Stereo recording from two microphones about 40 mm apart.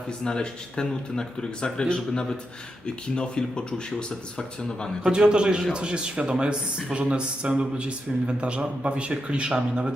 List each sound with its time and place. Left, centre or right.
0.3 s speech: centre
5.0 s speech: centre